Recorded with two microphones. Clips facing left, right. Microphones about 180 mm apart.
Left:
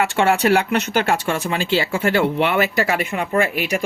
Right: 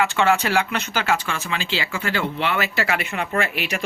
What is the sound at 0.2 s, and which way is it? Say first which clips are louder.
Speech: left 5 dB; 50° left (ahead or behind).